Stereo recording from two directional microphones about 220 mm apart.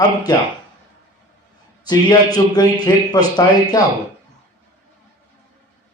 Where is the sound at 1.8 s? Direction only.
15° left (ahead or behind).